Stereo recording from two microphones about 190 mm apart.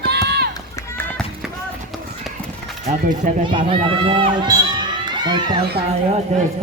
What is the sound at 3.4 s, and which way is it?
Speech, 25° right (ahead or behind).